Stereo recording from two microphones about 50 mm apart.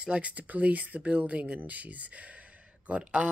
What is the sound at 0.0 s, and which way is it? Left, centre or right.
A woman's voice, right.